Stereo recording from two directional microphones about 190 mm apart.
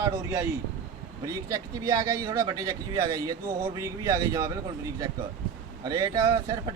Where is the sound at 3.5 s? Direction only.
50° right (ahead or behind).